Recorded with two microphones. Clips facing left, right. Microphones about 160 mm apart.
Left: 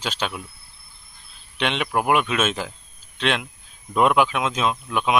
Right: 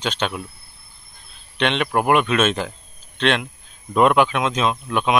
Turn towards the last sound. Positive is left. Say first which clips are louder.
# right 2 dB
turn(degrees=5)  # may be behind; listen again after turning